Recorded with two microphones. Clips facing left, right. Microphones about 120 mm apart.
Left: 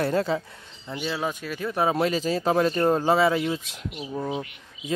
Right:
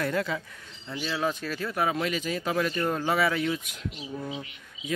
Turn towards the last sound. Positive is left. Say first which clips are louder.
# left 6 dB
turn(degrees=50)  # may be behind; listen again after turning